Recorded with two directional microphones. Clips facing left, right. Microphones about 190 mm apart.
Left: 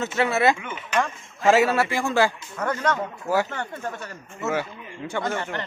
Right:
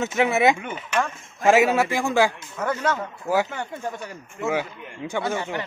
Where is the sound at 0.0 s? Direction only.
15° right (ahead or behind).